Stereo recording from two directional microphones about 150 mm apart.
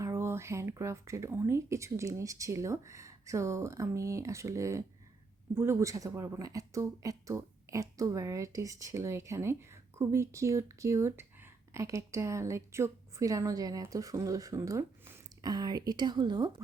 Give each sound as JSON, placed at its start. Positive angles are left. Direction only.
{"t": 0.0, "sound": "speech", "side_deg": -20}